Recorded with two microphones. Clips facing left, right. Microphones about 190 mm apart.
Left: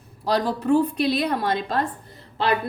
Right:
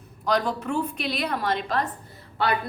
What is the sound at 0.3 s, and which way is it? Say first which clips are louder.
A woman's voice: left 4 dB; 30° left (ahead or behind).